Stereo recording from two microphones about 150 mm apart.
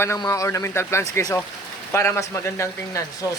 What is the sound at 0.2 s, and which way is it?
Speech, 20° left (ahead or behind).